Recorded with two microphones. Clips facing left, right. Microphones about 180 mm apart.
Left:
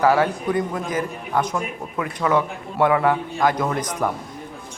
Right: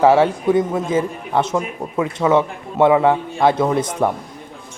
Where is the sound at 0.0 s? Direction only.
25° right (ahead or behind).